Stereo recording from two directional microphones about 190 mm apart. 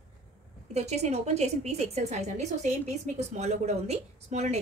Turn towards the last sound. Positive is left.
turn(degrees=-35)  # may be behind; listen again after turning